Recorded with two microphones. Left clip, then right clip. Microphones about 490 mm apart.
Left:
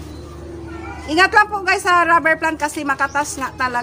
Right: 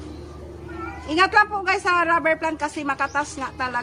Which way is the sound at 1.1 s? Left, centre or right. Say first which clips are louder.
Left 4 dB; right.